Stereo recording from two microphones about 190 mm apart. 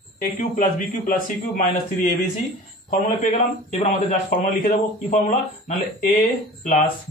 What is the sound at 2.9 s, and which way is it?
A man's voice, 45° left (ahead or behind).